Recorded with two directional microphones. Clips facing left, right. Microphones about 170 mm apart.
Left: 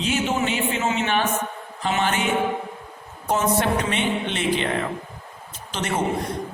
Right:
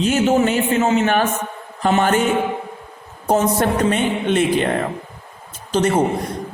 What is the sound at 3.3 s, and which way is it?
A man's voice, 40° right (ahead or behind).